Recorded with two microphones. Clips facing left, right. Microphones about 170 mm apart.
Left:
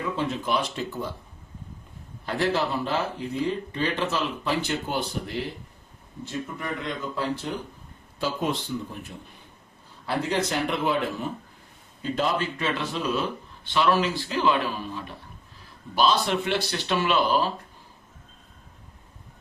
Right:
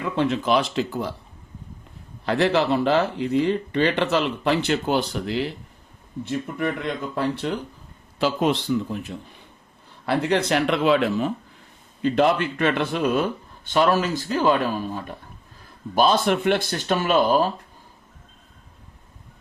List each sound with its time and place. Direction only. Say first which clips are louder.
0.0 s speech: right 5 dB; 75° right (ahead or behind); by 1.1 s 90° right
2.2 s speech: right 5 dB; 80° right
6.2 s speech: right 6 dB; 60° right (ahead or behind)
8.2 s speech: right 6 dB; 90° right
10.1 s speech: right 5 dB; 65° right (ahead or behind); by 11.3 s 90° right
12.0 s speech: right 7 dB; 65° right (ahead or behind)
13.7 s speech: right 3 dB; 45° right (ahead or behind)